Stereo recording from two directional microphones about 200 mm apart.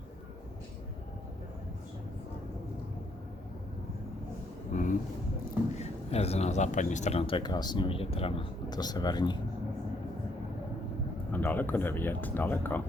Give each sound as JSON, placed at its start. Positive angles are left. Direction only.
{"t": 4.7, "sound": "a sound", "side_deg": 40}
{"t": 5.7, "sound": "speech", "side_deg": 30}
{"t": 11.3, "sound": "speech", "side_deg": 10}